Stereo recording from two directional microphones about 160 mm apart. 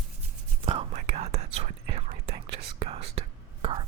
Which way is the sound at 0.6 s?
40° right (ahead or behind).